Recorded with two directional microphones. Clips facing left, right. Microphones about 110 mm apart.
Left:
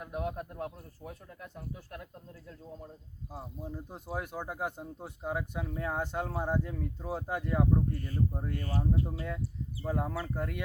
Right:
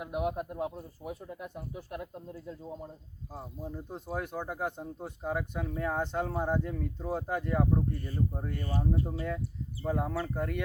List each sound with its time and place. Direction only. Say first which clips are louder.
0.0 s speech: right 4 dB; 15° right (ahead or behind)
3.3 s speech: right 1 dB; 5° left (ahead or behind)